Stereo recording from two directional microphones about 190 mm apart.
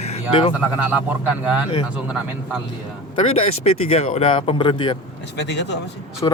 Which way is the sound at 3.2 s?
30° left (ahead or behind).